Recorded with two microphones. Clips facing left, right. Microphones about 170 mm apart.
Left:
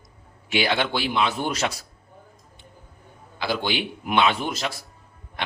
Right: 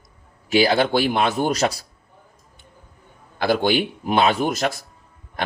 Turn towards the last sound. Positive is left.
turn(degrees=-40)  # may be behind; listen again after turning